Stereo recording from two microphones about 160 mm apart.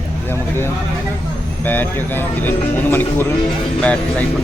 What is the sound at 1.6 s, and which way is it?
Speech, 10° left (ahead or behind).